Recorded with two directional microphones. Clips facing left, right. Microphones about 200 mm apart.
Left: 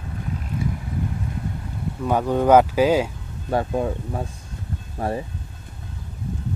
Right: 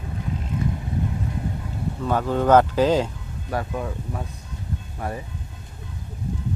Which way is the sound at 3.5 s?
30° left (ahead or behind).